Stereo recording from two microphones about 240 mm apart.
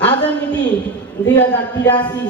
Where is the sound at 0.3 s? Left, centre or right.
Centre.